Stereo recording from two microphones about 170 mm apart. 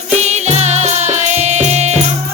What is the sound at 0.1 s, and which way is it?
Music, 40° right (ahead or behind).